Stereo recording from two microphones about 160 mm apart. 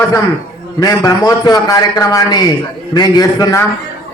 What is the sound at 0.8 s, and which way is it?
A man's voice, 25° left (ahead or behind).